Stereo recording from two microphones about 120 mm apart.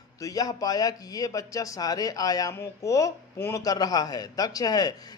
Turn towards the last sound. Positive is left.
turn(degrees=30)  # may be behind; listen again after turning